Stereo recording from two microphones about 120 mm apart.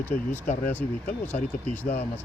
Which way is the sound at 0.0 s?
15° left (ahead or behind).